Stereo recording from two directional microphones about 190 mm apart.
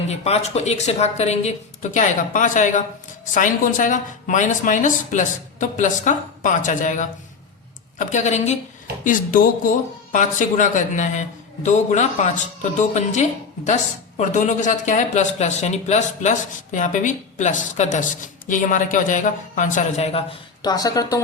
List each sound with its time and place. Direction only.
0.1 s speech: 35° left (ahead or behind)
20.6 s speech: 20° left (ahead or behind)